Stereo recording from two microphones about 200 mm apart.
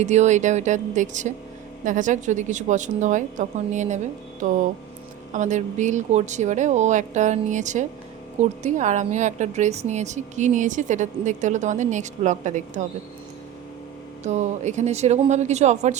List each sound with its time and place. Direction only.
0.0 s a woman's voice: 35° right (ahead or behind)
14.3 s a woman's voice: 35° right (ahead or behind)